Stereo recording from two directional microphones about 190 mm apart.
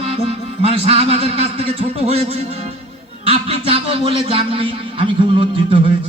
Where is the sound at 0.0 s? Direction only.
30° right (ahead or behind).